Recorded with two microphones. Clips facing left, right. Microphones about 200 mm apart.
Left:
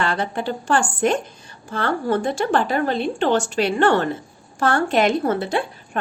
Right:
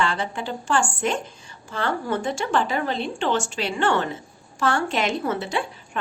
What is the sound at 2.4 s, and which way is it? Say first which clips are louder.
A woman's voice: left 4 dB; 55° left (ahead or behind).